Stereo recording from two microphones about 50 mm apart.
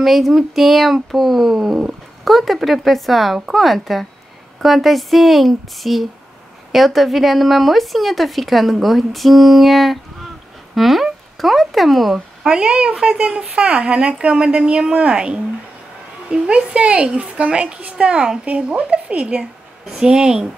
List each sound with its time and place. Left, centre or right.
0.0 s speech: centre
12.4 s a woman's voice: right
20.0 s speech: centre